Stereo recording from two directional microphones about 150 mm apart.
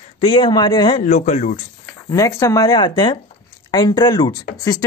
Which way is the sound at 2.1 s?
20° left (ahead or behind).